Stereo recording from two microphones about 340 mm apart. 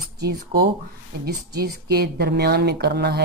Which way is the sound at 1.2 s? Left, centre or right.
Right.